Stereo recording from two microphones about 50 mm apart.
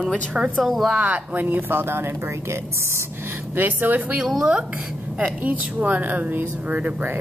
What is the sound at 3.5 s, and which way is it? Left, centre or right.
Speech, right.